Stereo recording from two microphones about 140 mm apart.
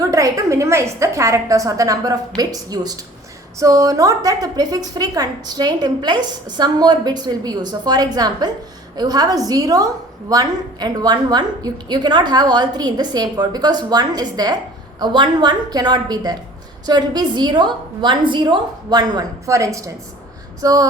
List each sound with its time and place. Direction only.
0.0 s a woman's voice: 25° right (ahead or behind)